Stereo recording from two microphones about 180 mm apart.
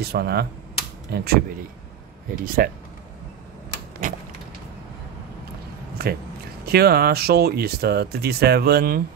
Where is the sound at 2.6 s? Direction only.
55° right (ahead or behind).